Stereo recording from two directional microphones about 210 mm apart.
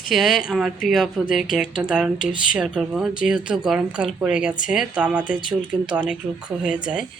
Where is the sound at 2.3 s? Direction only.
40° left (ahead or behind).